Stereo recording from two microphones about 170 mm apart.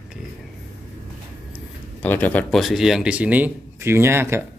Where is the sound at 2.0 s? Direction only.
10° left (ahead or behind).